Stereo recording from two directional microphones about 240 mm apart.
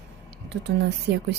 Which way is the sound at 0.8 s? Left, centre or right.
Right.